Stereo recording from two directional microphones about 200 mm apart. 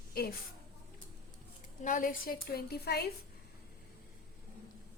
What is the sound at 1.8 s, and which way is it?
A woman's voice, 40° left (ahead or behind).